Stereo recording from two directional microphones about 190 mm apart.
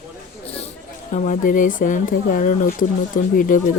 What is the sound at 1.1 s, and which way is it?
Speech, 45° left (ahead or behind).